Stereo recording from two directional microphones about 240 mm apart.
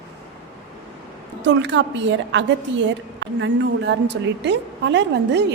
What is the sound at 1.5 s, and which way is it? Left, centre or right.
A woman's voice, right.